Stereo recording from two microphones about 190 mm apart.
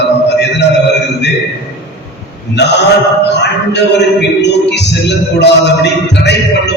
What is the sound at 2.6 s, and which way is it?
Speech, 65° left (ahead or behind).